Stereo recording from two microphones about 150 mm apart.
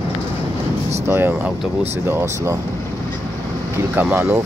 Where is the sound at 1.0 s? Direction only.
15° right (ahead or behind).